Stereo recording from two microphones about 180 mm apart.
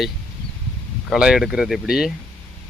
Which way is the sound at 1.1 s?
5° right (ahead or behind).